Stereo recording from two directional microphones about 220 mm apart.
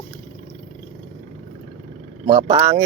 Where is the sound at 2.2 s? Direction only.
20° right (ahead or behind).